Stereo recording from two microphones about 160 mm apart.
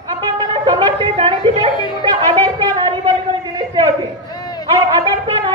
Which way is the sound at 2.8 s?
30° right (ahead or behind).